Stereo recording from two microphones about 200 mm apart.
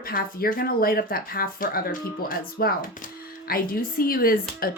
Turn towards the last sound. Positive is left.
turn(degrees=45)  # may be behind; listen again after turning